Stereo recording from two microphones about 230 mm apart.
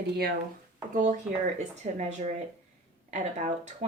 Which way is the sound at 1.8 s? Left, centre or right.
Right.